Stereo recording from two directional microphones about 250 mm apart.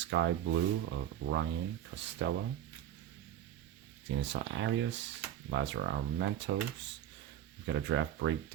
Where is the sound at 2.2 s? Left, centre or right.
Right.